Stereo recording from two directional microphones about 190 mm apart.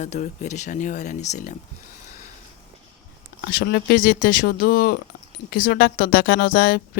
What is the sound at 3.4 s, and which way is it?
Speech, 55° left (ahead or behind).